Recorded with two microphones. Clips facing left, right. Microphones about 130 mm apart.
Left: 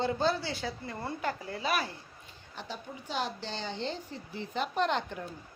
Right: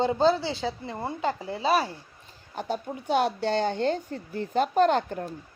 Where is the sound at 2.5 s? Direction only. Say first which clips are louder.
Right 10 dB; 50° right (ahead or behind).